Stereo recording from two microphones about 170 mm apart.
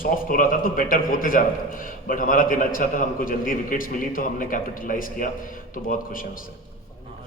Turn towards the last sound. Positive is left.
turn(degrees=55)  # may be behind; listen again after turning